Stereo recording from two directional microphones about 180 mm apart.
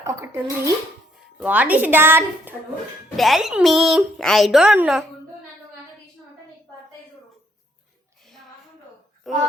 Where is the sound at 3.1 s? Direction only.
Centre (ahead or behind).